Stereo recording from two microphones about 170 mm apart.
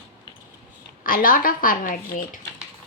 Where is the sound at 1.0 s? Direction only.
55° left (ahead or behind).